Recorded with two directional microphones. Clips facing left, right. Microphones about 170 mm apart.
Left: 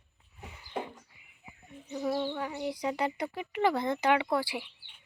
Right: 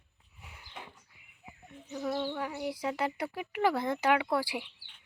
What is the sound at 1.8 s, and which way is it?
A child's voice, centre (ahead or behind).